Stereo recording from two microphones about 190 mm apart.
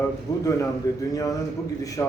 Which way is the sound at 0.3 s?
20° left (ahead or behind).